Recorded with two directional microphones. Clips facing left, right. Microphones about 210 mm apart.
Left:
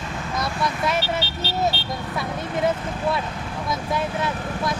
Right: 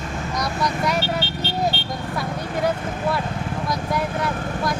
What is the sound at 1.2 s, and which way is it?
Vehicle, 40° left (ahead or behind).